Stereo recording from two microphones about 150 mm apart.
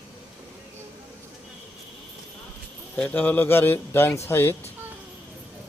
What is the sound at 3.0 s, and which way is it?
Speech, 10° left (ahead or behind).